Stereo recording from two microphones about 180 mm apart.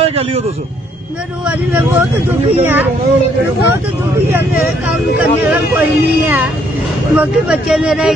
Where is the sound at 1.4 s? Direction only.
5° right (ahead or behind).